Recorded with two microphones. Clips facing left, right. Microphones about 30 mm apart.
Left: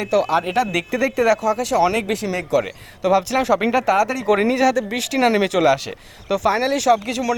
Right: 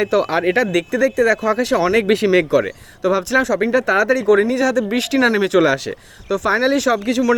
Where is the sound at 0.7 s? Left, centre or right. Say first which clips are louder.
Right 4 dB; centre.